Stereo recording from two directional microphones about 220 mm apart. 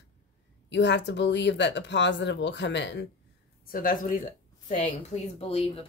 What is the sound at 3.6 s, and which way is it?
Speech, 40° left (ahead or behind).